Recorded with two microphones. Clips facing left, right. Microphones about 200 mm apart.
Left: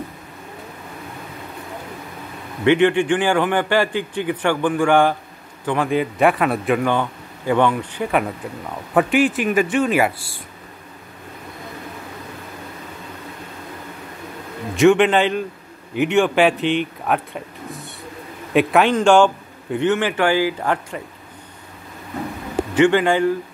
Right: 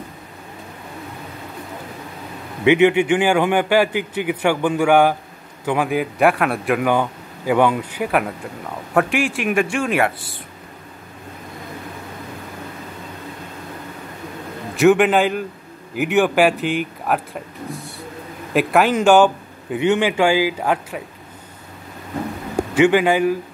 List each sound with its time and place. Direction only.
2.6 s a man's voice: 10° right (ahead or behind)
14.8 s a man's voice: 5° right (ahead or behind)
18.5 s a man's voice: centre (ahead or behind)
22.8 s a man's voice: 10° right (ahead or behind)